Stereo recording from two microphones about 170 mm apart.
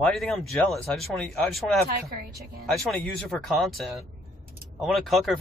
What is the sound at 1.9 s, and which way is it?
Speech, 65° right (ahead or behind).